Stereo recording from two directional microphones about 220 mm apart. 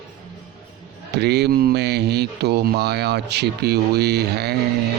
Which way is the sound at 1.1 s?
50° right (ahead or behind).